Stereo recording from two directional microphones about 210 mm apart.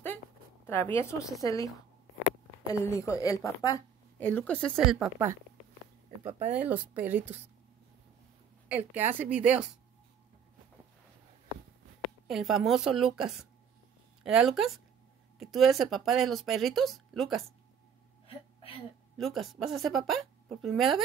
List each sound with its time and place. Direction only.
0.7 s a woman's voice: 10° left (ahead or behind); by 5.4 s 10° right (ahead or behind)
6.5 s a woman's voice: 5° right (ahead or behind)
8.6 s a woman's voice: 10° right (ahead or behind)
12.3 s speech: centre (ahead or behind)
18.2 s hiccup: 25° left (ahead or behind)
19.1 s speech: centre (ahead or behind)